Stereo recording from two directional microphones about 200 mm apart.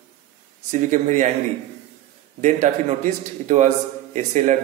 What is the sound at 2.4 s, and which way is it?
A man's voice, 40° right (ahead or behind).